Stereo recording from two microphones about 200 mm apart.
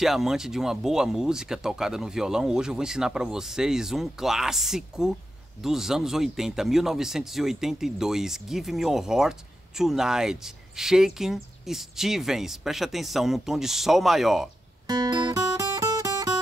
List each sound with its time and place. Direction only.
0.0 s speech: centre (ahead or behind)
14.9 s guitar: 20° right (ahead or behind)